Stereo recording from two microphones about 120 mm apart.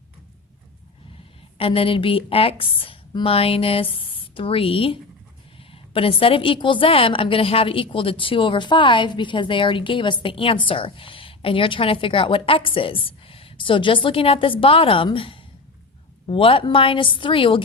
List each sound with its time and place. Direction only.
1.5 s a woman's voice: 50° left (ahead or behind)